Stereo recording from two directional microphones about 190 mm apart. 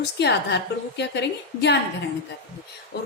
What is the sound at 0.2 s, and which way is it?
A woman's voice, 60° left (ahead or behind).